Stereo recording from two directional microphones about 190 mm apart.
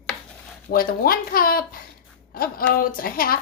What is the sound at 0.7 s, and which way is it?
Speech, 50° left (ahead or behind).